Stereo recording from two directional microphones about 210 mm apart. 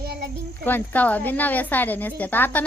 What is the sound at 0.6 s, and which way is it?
A woman's voice, 10° left (ahead or behind).